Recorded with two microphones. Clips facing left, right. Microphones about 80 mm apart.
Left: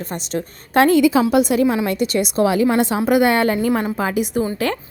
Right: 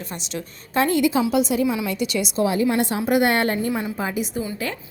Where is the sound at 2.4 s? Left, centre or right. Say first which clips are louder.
Left 4 dB; left.